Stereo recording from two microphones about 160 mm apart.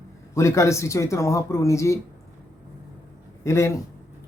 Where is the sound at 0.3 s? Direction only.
20° left (ahead or behind).